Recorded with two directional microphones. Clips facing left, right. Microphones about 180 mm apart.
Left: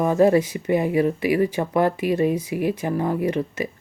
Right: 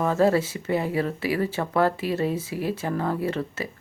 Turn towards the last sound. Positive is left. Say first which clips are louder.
# left 4 dB
turn(degrees=15)  # may be behind; listen again after turning